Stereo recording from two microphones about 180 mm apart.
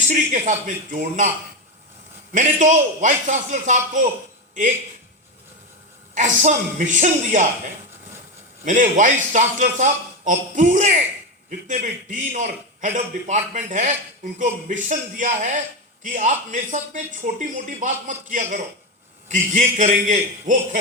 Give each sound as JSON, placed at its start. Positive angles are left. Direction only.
{"t": 0.1, "sound": "a man's voice", "side_deg": -45}
{"t": 2.3, "sound": "a man's voice", "side_deg": -45}
{"t": 6.1, "sound": "a man's voice", "side_deg": -45}
{"t": 8.6, "sound": "a man's voice", "side_deg": -45}